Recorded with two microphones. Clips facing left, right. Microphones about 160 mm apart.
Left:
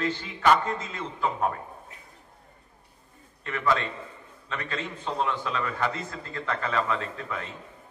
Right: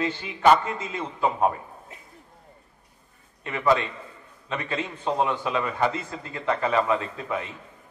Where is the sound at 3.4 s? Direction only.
20° right (ahead or behind).